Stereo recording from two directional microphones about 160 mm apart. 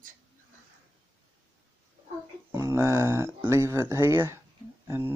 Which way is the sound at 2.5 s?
15° right (ahead or behind).